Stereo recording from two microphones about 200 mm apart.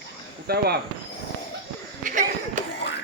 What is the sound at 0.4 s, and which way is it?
Speech, 50° right (ahead or behind).